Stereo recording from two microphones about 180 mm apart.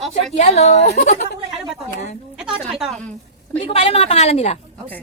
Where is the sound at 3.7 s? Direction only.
35° left (ahead or behind).